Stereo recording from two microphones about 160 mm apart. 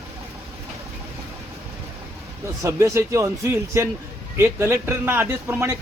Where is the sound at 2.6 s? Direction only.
20° right (ahead or behind).